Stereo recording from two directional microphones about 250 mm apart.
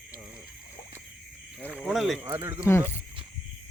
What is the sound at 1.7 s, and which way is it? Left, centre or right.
Speech, centre.